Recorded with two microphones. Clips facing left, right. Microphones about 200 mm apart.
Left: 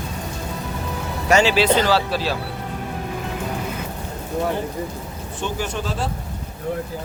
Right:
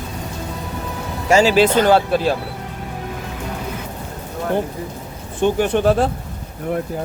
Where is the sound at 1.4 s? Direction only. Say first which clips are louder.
Right 4 dB; 45° right (ahead or behind).